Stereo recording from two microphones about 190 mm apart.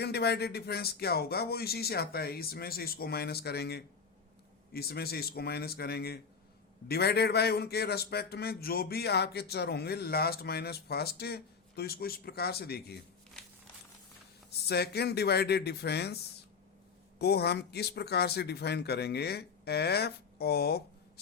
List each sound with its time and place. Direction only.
0.0 s a man's voice: 60° left (ahead or behind)
14.7 s a man's voice: 60° left (ahead or behind)
17.2 s a man's voice: 60° left (ahead or behind)